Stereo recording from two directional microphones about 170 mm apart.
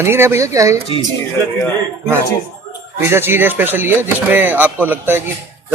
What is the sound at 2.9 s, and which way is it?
Speech, 15° right (ahead or behind).